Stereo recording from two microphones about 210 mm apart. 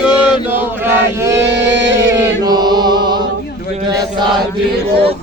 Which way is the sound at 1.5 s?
55° right (ahead or behind).